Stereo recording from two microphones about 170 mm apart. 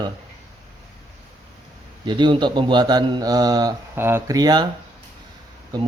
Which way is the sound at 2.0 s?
25° right (ahead or behind).